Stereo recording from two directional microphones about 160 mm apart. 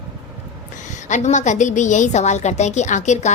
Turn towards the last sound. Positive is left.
turn(degrees=45)  # may be behind; listen again after turning